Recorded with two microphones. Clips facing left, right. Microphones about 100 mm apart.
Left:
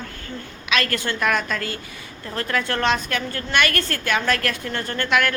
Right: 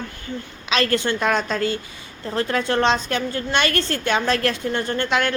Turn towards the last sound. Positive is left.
turn(degrees=-25)  # may be behind; listen again after turning